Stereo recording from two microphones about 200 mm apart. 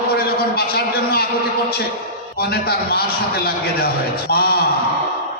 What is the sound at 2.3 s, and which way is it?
Speech, 50° left (ahead or behind).